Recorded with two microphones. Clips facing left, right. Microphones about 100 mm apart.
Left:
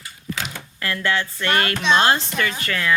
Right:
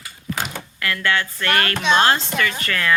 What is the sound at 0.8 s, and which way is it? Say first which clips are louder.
Speech: right 1 dB; 25° left (ahead or behind).